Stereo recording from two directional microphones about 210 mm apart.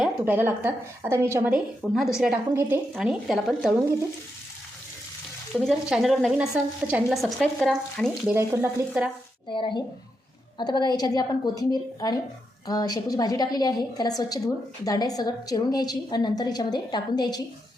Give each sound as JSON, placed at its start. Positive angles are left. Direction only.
{"t": 0.0, "sound": "speech", "side_deg": -10}
{"t": 5.5, "sound": "speech", "side_deg": 0}
{"t": 8.4, "sound": "speech", "side_deg": -10}
{"t": 9.5, "sound": "a woman's voice", "side_deg": 25}